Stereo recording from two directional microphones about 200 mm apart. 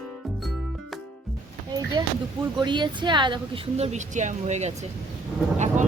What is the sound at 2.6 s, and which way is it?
A woman's voice, 25° right (ahead or behind).